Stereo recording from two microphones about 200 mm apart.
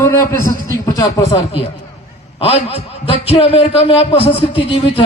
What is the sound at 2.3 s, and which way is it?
A man's voice, 30° left (ahead or behind).